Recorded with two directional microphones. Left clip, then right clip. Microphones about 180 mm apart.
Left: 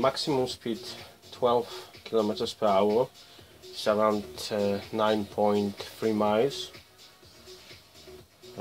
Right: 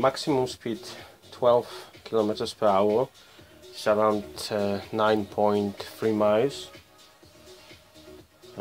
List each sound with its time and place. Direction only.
0.0 s speech: 35° right (ahead or behind)